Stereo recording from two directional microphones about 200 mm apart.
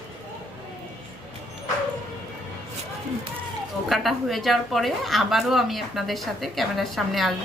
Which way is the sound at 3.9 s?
Centre (ahead or behind).